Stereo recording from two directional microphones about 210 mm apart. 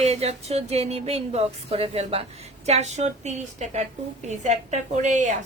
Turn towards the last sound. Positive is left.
turn(degrees=-35)  # may be behind; listen again after turning